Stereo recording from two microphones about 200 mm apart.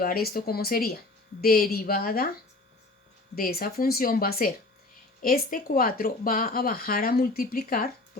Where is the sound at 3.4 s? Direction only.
45° left (ahead or behind).